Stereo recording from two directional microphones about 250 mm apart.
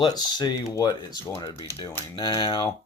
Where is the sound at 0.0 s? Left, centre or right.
Centre.